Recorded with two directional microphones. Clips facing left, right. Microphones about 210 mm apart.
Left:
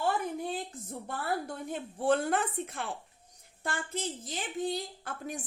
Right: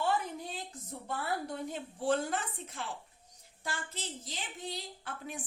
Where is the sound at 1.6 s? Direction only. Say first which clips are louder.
Left 5 dB; 55° left (ahead or behind).